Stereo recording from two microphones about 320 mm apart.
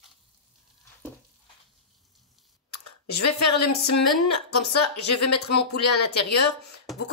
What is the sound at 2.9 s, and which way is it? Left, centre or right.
Speech, left.